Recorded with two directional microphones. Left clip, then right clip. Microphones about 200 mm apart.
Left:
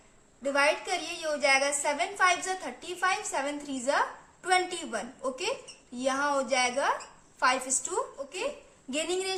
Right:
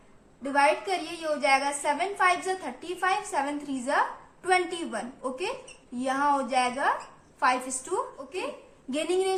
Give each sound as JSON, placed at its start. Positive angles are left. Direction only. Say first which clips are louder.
{"t": 0.5, "sound": "a woman's voice", "louder": "right 3 dB", "side_deg": 25}